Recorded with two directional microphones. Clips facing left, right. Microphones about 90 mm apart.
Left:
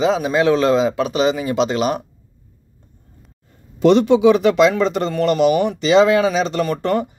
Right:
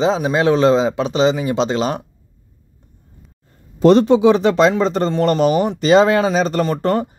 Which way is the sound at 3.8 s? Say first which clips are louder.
Right 1 dB; 35° right (ahead or behind).